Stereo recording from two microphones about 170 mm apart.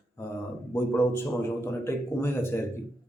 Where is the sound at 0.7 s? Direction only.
15° left (ahead or behind).